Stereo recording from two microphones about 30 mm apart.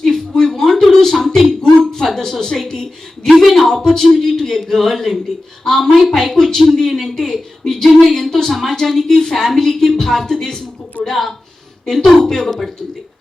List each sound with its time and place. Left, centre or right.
0.0 s a sound: centre
1.9 s music: centre
3.5 s a woman's voice: centre
7.0 s speech: centre
7.3 s a woman's voice: centre
9.0 s a woman's voice: centre
11.1 s a woman's voice: centre